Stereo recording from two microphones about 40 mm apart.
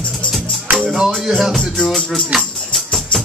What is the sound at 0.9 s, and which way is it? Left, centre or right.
Music, centre.